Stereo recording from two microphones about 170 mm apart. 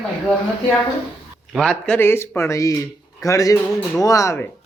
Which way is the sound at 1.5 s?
Centre (ahead or behind).